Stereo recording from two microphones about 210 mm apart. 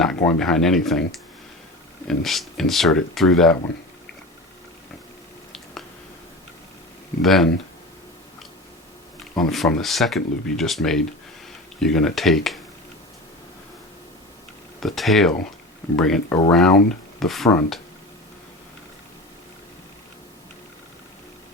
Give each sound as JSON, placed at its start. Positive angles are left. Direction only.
{"t": 0.0, "sound": "speech", "side_deg": 5}
{"t": 7.2, "sound": "speech", "side_deg": 0}
{"t": 9.5, "sound": "speech", "side_deg": 0}
{"t": 14.8, "sound": "speech", "side_deg": 0}